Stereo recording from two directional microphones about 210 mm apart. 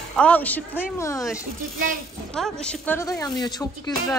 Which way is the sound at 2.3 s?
5° left (ahead or behind).